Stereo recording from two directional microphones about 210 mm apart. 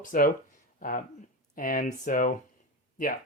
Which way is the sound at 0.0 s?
40° left (ahead or behind).